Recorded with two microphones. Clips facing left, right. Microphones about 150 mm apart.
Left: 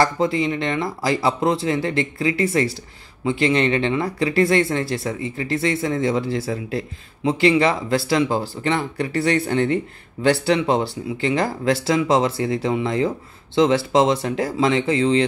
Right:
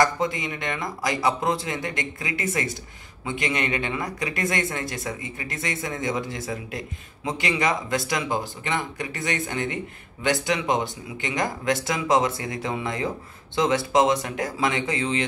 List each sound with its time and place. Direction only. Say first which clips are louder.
0.0 s speech: left 4 dB; 30° left (ahead or behind)